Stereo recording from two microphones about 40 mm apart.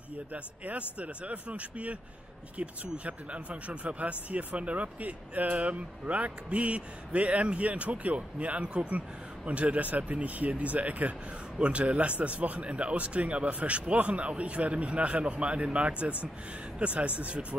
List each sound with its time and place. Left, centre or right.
0.3 s speech: right